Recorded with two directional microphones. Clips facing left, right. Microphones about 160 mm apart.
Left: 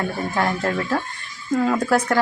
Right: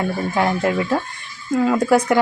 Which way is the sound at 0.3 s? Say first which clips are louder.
Right 3 dB; 10° right (ahead or behind).